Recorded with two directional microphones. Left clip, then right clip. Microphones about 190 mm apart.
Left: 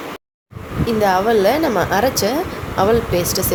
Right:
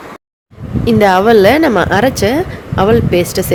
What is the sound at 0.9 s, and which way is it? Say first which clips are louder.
Speech: right 7 dB; 35° right (ahead or behind).